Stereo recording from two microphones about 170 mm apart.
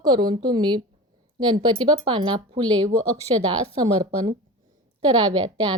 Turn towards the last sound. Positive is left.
turn(degrees=-25)  # may be behind; listen again after turning